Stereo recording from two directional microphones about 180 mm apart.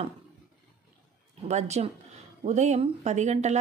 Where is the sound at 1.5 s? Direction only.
35° right (ahead or behind).